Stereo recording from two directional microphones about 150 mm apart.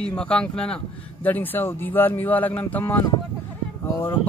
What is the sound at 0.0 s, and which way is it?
Speech, 5° left (ahead or behind).